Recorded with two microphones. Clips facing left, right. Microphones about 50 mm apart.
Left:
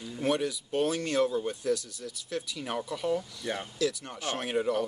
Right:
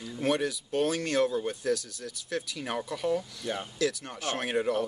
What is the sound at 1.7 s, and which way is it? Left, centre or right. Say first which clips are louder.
Speech: even; right.